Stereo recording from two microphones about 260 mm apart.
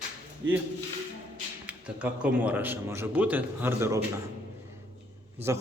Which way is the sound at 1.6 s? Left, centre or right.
Centre.